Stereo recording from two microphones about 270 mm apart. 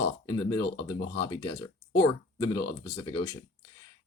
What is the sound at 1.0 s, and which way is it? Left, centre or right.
Speech, left.